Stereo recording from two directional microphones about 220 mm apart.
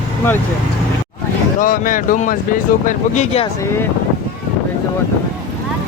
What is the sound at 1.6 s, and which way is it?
Speech, 40° left (ahead or behind).